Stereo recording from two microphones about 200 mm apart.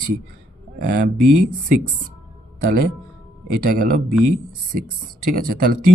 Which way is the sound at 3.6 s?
45° right (ahead or behind).